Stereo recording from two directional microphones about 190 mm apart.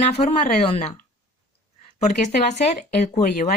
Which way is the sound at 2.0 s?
40° left (ahead or behind).